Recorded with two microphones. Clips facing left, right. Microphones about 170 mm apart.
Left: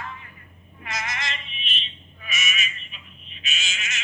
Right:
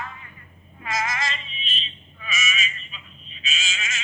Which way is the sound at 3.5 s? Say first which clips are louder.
Right 2 dB; 90° right.